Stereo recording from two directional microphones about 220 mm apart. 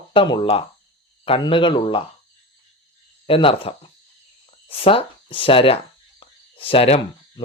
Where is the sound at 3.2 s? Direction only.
25° left (ahead or behind).